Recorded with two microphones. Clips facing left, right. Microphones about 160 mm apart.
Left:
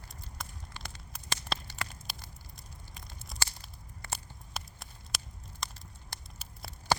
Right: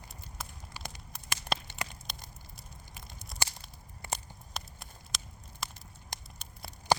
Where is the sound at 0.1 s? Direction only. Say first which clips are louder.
Left 1 dB; 5° right (ahead or behind).